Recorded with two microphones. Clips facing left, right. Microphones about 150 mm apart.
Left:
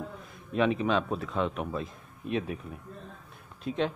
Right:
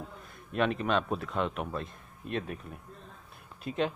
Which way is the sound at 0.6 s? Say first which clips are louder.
Left 2 dB; 5° left (ahead or behind).